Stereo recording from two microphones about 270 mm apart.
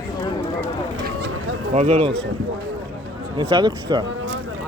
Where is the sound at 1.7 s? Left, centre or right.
Right.